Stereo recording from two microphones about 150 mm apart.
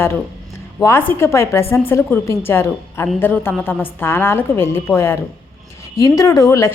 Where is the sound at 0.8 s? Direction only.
15° left (ahead or behind).